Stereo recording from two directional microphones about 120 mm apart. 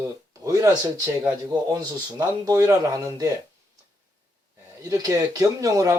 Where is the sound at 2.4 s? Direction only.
30° right (ahead or behind).